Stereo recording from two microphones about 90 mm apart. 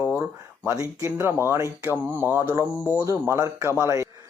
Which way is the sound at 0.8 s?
40° right (ahead or behind).